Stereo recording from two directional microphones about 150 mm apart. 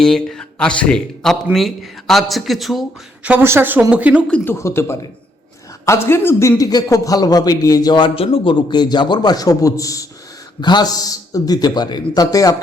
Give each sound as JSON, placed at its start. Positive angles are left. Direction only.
{"t": 0.0, "sound": "a man's voice", "side_deg": 5}
{"t": 3.2, "sound": "speech", "side_deg": -15}
{"t": 4.3, "sound": "a man's voice", "side_deg": 15}